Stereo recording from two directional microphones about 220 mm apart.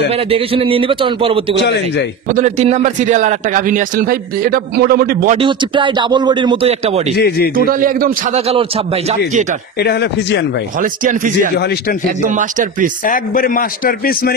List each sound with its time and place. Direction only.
0.1 s a man's voice: 25° right (ahead or behind)
1.6 s speech: 50° left (ahead or behind)
2.2 s a man's voice: 30° right (ahead or behind)
5.4 s a man's voice: 20° right (ahead or behind)
7.2 s speech: 45° left (ahead or behind)
7.5 s a man's voice: 40° right (ahead or behind)
8.4 s a man's voice: 25° right (ahead or behind)
9.8 s speech: 50° left (ahead or behind)
10.8 s a man's voice: 40° right (ahead or behind)
13.0 s a man's voice: 40° left (ahead or behind)